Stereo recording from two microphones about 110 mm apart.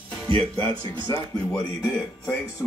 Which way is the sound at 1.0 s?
35° left (ahead or behind).